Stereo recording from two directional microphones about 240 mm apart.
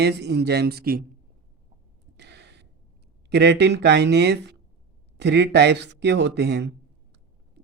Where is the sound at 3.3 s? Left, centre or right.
Right.